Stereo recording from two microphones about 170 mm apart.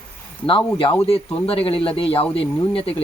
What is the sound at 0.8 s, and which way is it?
Speech, 35° left (ahead or behind).